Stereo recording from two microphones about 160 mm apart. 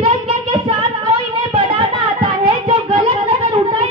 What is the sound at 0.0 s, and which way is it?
Child singing, 30° right (ahead or behind).